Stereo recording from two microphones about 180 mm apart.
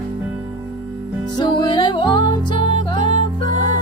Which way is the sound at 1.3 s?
25° left (ahead or behind).